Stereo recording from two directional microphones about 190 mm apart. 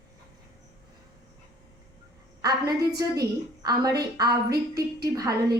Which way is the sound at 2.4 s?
20° right (ahead or behind).